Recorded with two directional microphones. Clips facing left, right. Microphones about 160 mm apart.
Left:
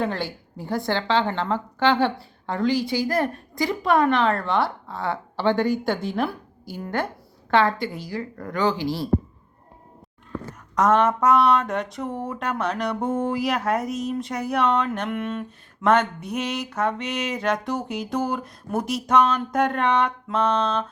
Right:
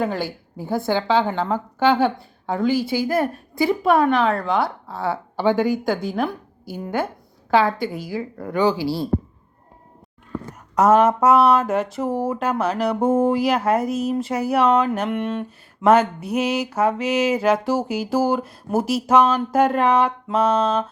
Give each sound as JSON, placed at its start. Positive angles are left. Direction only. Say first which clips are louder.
{"t": 0.0, "sound": "a woman's voice", "louder": "right 2 dB", "side_deg": 0}
{"t": 10.8, "sound": "speech", "louder": "right 4 dB", "side_deg": -5}